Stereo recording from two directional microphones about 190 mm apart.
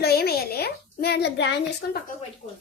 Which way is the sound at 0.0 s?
55° left (ahead or behind).